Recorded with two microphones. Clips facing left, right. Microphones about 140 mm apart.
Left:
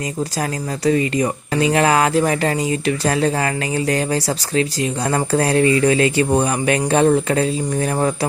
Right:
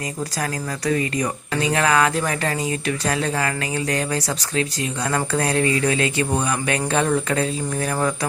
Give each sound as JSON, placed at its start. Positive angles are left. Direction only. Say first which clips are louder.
{"t": 0.9, "sound": "speech", "louder": "left 5 dB", "side_deg": 25}